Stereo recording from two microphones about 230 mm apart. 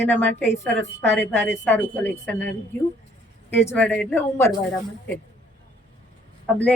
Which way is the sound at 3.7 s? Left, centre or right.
Centre.